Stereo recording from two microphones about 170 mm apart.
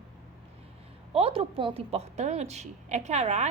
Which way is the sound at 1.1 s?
35° right (ahead or behind).